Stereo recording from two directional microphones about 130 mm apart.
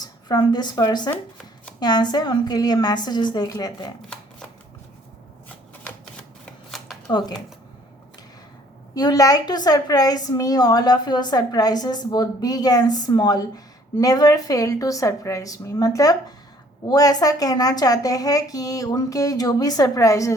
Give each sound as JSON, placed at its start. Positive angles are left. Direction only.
{"t": 0.0, "sound": "a woman's voice", "side_deg": 30}
{"t": 6.7, "sound": "shuffling cards", "side_deg": 0}
{"t": 7.1, "sound": "a woman's voice", "side_deg": 30}
{"t": 9.0, "sound": "a woman's voice", "side_deg": 30}